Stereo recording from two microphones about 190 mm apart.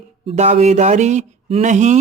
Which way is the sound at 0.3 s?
35° right (ahead or behind).